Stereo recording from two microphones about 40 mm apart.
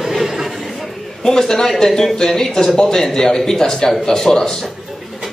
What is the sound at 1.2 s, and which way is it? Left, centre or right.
A man's voice, centre.